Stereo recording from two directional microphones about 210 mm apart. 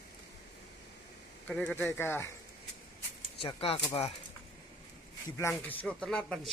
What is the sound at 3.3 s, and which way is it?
Speech, 25° left (ahead or behind).